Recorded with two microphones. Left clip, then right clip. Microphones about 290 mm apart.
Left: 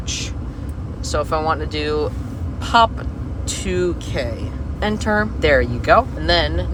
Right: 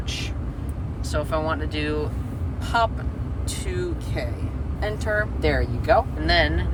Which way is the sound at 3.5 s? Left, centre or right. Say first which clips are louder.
Left 9 dB; left.